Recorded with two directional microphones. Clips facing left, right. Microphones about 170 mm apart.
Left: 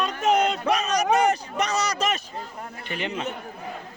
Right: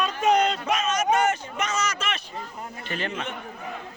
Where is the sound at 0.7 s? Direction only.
35° left (ahead or behind).